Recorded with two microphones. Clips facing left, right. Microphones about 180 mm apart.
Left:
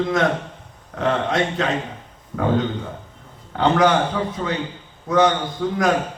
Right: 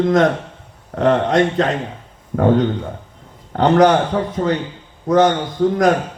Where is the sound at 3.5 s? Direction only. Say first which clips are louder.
Right 5 dB; 40° right (ahead or behind).